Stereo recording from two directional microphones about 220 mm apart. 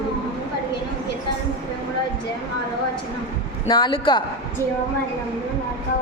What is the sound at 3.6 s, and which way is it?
Speech, 20° left (ahead or behind).